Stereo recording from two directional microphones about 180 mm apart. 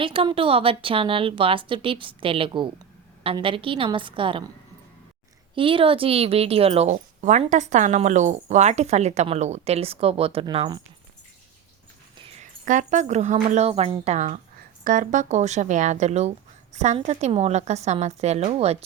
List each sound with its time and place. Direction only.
0.0 s a woman's voice: 30° right (ahead or behind)
5.5 s speech: 30° right (ahead or behind)
12.4 s speech: 45° right (ahead or behind)